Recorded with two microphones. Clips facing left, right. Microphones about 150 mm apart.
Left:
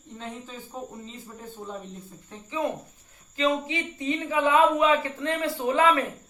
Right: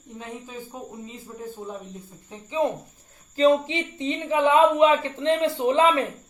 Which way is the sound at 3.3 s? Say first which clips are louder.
Right 6 dB; 30° right (ahead or behind).